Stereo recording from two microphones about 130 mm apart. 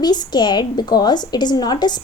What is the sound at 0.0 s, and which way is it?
A woman's voice, 30° left (ahead or behind).